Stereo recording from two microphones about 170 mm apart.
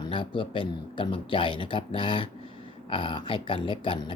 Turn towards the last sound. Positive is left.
turn(degrees=30)  # may be behind; listen again after turning